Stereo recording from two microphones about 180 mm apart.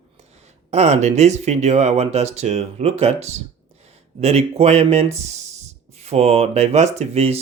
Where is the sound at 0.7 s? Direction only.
35° right (ahead or behind).